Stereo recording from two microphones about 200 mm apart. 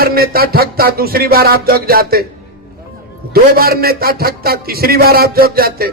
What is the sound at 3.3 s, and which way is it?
Music, 50° right (ahead or behind).